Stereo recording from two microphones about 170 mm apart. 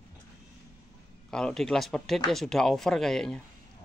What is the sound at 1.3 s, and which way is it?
Speech, 5° left (ahead or behind).